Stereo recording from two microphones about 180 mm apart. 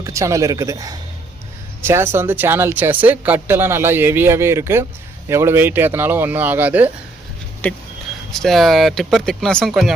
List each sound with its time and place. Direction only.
0.0 s speech: 15° right (ahead or behind)
7.6 s speech: 10° left (ahead or behind)